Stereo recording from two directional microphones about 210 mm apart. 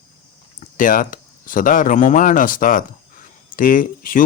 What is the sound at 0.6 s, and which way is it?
Speech, 40° left (ahead or behind).